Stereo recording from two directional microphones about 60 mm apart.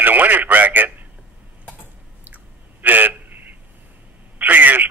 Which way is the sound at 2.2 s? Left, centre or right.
Right.